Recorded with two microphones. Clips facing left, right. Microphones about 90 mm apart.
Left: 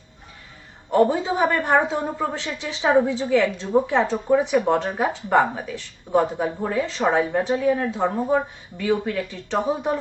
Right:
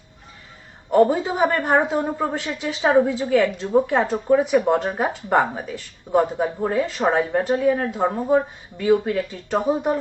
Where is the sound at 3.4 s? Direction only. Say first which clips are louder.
Right 2 dB; 10° right (ahead or behind).